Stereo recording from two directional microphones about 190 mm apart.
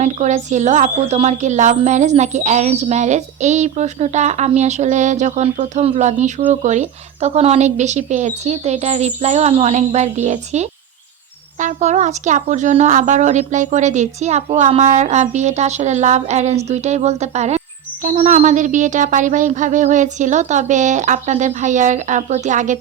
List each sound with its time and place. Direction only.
0.0 s a woman's voice: 40° right (ahead or behind)